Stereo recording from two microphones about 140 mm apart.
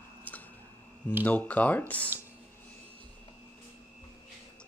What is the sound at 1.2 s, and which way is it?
Speech, 10° left (ahead or behind).